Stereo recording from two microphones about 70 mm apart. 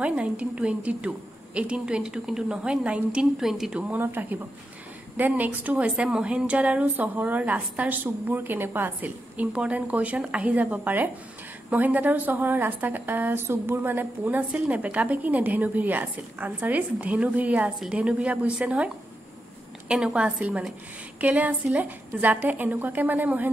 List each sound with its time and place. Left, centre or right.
0.0 s a woman's voice: centre
3.9 s a woman's voice: right
19.9 s a woman's voice: centre